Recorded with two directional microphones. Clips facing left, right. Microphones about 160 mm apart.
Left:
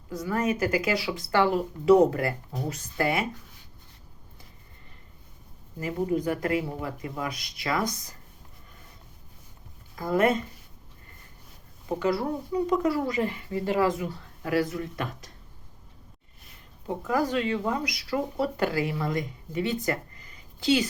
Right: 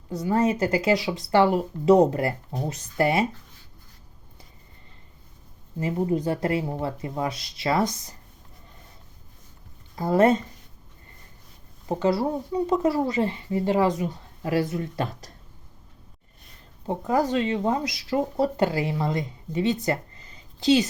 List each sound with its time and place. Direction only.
0.2 s speech: 25° right (ahead or behind)
5.8 s speech: 25° right (ahead or behind)
9.9 s speech: 30° right (ahead or behind)
11.9 s speech: 25° right (ahead or behind)
17.0 s speech: 25° right (ahead or behind)